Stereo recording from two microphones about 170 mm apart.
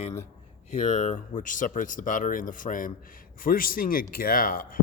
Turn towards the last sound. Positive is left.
turn(degrees=55)  # may be behind; listen again after turning